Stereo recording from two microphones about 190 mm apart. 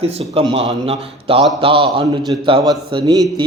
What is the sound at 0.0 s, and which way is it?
A man's voice, 30° right (ahead or behind).